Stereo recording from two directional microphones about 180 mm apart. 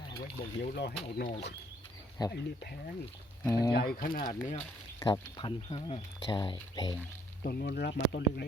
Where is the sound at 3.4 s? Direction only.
20° left (ahead or behind).